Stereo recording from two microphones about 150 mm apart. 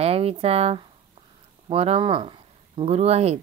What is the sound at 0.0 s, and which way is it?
Speech, 40° right (ahead or behind).